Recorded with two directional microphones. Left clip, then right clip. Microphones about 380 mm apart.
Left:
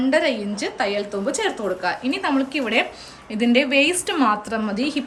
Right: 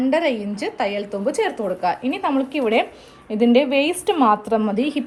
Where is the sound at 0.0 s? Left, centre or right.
Centre.